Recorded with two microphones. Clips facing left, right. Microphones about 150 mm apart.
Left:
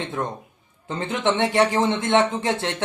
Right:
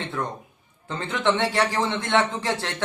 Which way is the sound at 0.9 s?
20° left (ahead or behind).